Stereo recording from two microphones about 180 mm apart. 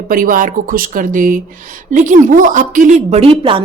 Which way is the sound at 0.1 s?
50° right (ahead or behind).